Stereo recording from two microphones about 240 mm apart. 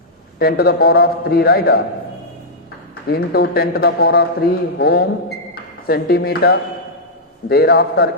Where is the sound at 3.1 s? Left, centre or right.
Left.